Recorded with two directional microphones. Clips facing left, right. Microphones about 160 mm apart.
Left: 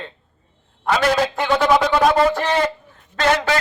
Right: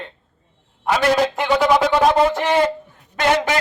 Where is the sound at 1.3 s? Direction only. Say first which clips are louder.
Even; 10° right (ahead or behind).